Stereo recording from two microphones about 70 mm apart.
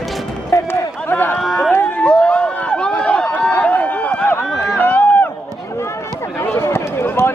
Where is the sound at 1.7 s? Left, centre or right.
Left.